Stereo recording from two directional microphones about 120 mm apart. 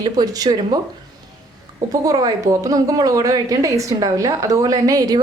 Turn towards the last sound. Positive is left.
turn(degrees=-30)  # may be behind; listen again after turning